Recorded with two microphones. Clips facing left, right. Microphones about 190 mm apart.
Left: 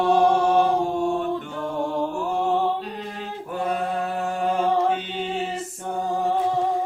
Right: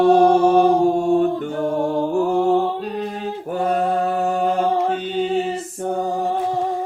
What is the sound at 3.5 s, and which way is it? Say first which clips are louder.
Mantra: right 6 dB; 45° right (ahead or behind).